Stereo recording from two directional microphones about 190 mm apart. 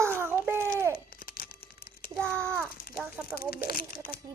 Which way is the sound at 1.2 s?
50° left (ahead or behind).